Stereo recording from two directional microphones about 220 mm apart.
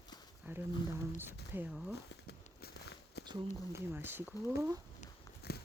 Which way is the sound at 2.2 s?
45° left (ahead or behind).